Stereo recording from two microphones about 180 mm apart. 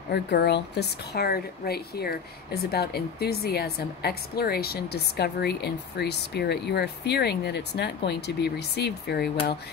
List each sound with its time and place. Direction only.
0.1 s speech: 65° left (ahead or behind)